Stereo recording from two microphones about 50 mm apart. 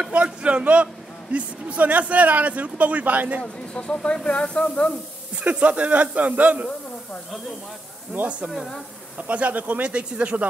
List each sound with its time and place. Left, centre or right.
0.0 s a man's voice: right
3.7 s speech: centre
5.4 s a man's voice: right
8.1 s a man's voice: right
8.5 s speech: centre
9.3 s a man's voice: right